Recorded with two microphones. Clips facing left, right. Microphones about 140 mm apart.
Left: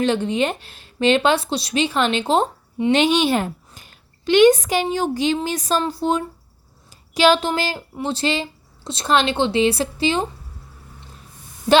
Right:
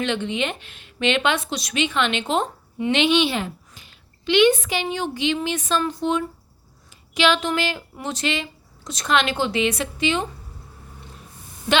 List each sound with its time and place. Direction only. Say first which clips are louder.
0.0 s a woman's voice: left 5 dB; 35° left (ahead or behind)
2.9 s a woman's voice: left 2 dB; 40° left (ahead or behind)